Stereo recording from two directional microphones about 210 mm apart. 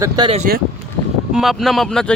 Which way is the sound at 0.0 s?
20° right (ahead or behind).